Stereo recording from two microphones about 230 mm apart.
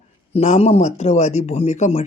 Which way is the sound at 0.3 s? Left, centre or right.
Left.